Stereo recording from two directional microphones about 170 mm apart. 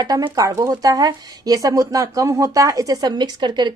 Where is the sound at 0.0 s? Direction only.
25° right (ahead or behind).